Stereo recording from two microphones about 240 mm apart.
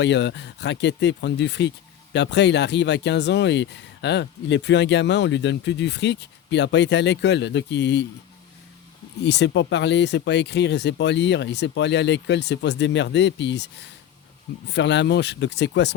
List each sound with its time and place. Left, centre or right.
0.0 s speech: left
9.2 s speech: left
14.7 s speech: left